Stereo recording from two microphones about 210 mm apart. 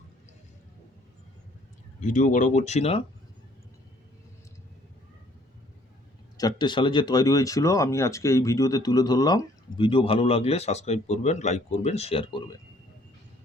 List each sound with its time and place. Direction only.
2.0 s speech: 35° left (ahead or behind)
6.3 s speech: 20° left (ahead or behind)